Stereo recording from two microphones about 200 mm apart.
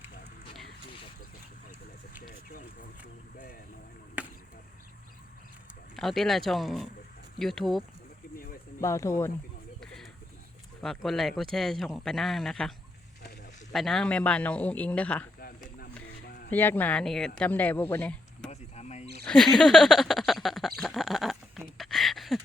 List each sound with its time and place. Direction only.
2.2 s a sound: 45° left (ahead or behind)
4.2 s chop: 5° right (ahead or behind)
6.0 s speech: centre (ahead or behind)
8.8 s speech: 15° left (ahead or behind)
9.8 s a sound: 5° left (ahead or behind)
10.8 s speech: centre (ahead or behind)
13.7 s speech: centre (ahead or behind)
15.4 s a sound: 50° left (ahead or behind)
16.5 s speech: 10° left (ahead or behind)
18.8 s wild animals: 35° left (ahead or behind)
19.2 s speech: 5° left (ahead or behind)
21.8 s a sound: centre (ahead or behind)